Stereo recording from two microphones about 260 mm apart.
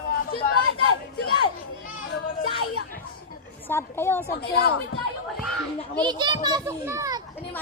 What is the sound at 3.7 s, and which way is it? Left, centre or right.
Speech, centre.